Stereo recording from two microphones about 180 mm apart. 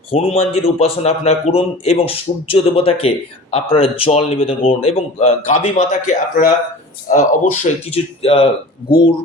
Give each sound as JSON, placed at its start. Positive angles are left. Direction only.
{"t": 0.1, "sound": "speech", "side_deg": 30}